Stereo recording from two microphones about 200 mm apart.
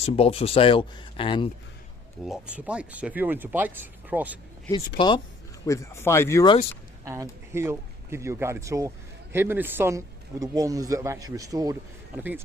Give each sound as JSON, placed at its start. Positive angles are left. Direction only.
{"t": 0.0, "sound": "speech", "side_deg": 30}
{"t": 2.2, "sound": "speech", "side_deg": -5}
{"t": 4.9, "sound": "speech", "side_deg": 25}
{"t": 7.0, "sound": "a man's voice", "side_deg": -15}